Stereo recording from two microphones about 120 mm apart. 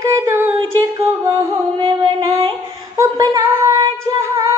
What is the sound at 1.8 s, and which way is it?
Music, 40° right (ahead or behind).